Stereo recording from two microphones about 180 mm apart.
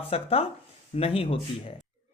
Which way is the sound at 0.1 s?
30° left (ahead or behind).